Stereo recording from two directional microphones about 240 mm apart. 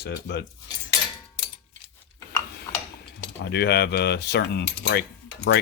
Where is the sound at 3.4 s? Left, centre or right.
Left.